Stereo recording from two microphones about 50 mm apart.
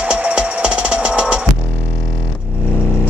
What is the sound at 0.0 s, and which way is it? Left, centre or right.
Music, right.